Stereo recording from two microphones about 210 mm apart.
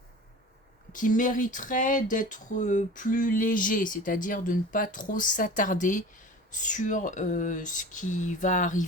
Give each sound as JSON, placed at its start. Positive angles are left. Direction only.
{"t": 0.9, "sound": "speech", "side_deg": 40}